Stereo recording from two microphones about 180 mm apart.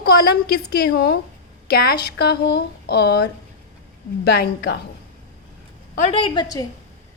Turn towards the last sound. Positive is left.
turn(degrees=20)  # may be behind; listen again after turning